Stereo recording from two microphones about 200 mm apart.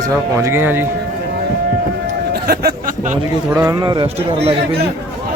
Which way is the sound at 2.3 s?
50° right (ahead or behind).